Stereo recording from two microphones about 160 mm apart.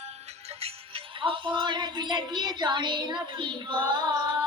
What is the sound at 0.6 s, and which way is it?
Speech, 35° right (ahead or behind).